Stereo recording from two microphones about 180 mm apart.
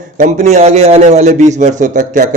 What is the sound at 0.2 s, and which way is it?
A man's voice, 40° right (ahead or behind).